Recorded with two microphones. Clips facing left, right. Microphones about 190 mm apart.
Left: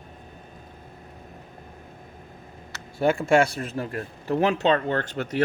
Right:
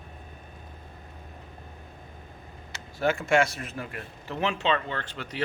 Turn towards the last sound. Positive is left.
turn(degrees=45)  # may be behind; listen again after turning